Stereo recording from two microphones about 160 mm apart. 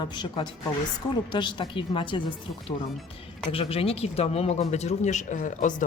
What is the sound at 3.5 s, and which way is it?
Speech, 35° left (ahead or behind).